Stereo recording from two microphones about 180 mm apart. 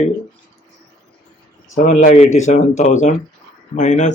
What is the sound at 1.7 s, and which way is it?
Speech, 45° left (ahead or behind).